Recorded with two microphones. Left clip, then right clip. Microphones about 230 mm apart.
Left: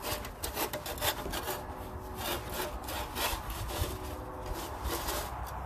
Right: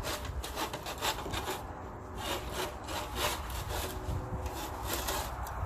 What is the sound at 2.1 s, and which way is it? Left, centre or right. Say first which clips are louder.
Wood: even; left.